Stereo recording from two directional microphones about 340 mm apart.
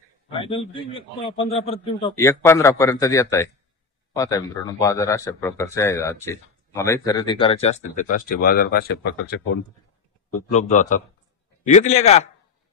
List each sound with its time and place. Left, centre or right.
0.3 s speech: centre
10.5 s a man's voice: centre